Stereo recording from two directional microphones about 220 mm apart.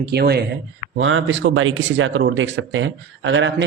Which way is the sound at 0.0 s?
45° right (ahead or behind).